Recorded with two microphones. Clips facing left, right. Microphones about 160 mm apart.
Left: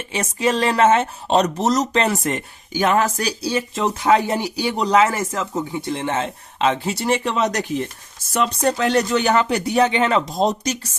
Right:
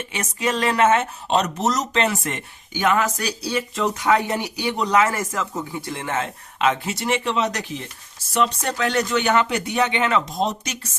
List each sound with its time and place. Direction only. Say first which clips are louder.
0.1 s speech: left 5 dB; 30° left (ahead or behind)
8.8 s speech: left 1 dB; 35° left (ahead or behind)